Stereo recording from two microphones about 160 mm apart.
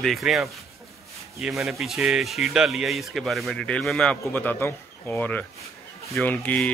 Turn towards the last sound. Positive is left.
turn(degrees=10)  # may be behind; listen again after turning